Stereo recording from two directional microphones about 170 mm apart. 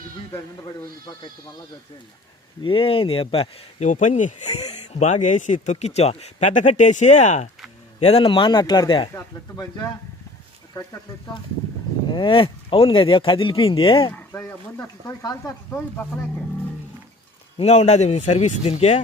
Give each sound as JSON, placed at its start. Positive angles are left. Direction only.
{"t": 2.6, "sound": "speech", "side_deg": 30}
{"t": 3.8, "sound": "a man's voice", "side_deg": 45}
{"t": 12.1, "sound": "speech", "side_deg": 30}
{"t": 14.1, "sound": "speech", "side_deg": 15}
{"t": 17.6, "sound": "speech", "side_deg": 40}